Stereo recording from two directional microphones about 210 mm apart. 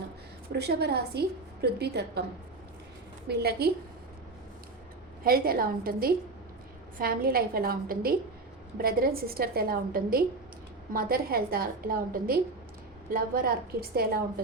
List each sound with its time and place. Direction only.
0.5 s a woman's voice: 50° right (ahead or behind)
3.2 s a woman's voice: 50° right (ahead or behind)
5.2 s a woman's voice: 45° right (ahead or behind)